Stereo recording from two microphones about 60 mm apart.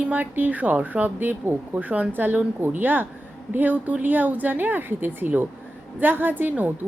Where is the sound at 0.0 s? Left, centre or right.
Right.